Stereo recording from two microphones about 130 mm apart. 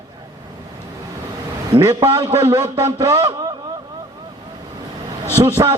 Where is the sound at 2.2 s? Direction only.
20° right (ahead or behind).